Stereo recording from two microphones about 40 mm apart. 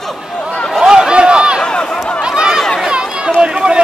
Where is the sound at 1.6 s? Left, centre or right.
Centre.